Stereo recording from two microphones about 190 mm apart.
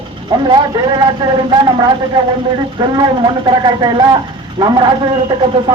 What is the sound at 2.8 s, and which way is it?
A man's voice, 25° right (ahead or behind).